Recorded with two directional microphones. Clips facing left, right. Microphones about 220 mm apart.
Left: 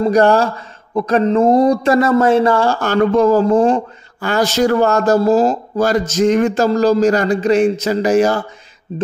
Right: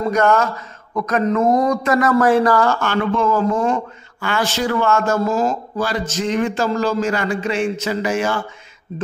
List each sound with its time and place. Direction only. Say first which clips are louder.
0.1 s a man's voice: left 2 dB; 30° left (ahead or behind)